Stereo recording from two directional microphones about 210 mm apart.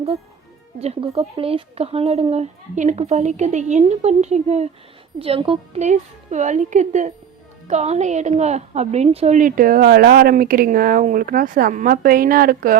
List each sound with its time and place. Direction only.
0.8 s a woman's voice: 30° right (ahead or behind); by 12.7 s 45° right (ahead or behind)